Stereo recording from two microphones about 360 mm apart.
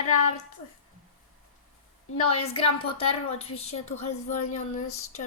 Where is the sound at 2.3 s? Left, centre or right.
Centre.